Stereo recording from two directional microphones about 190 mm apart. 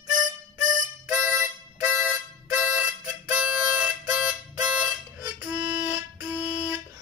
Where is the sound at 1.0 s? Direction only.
10° right (ahead or behind).